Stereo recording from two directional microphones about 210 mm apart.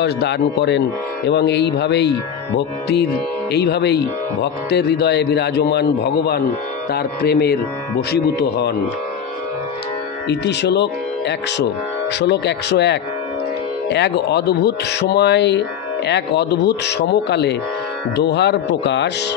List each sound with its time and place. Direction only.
0.0 s a man's voice: 55° left (ahead or behind)
10.2 s a man's voice: 55° left (ahead or behind)